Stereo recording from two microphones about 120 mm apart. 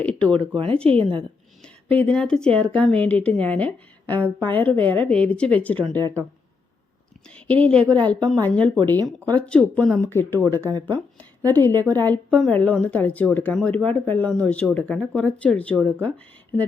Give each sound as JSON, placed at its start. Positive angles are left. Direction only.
{"t": 0.0, "sound": "speech", "side_deg": 10}
{"t": 0.5, "sound": "a woman's voice", "side_deg": -45}
{"t": 1.6, "sound": "speech", "side_deg": 10}
{"t": 7.3, "sound": "speech", "side_deg": 10}
{"t": 10.4, "sound": "speech", "side_deg": -30}
{"t": 10.8, "sound": "a woman's voice", "side_deg": 15}